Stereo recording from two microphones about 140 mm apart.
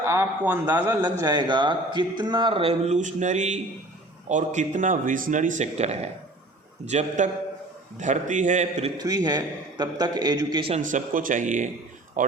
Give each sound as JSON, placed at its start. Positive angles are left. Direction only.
{"t": 0.0, "sound": "a man's voice", "side_deg": -20}
{"t": 9.0, "sound": "a man's voice", "side_deg": -30}
{"t": 10.8, "sound": "a man's voice", "side_deg": -65}